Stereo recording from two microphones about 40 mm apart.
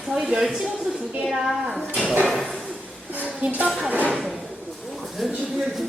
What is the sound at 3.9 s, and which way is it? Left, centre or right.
Speech, right.